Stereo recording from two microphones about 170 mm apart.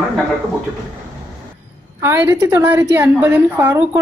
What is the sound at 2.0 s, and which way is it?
A woman's voice, 15° right (ahead or behind).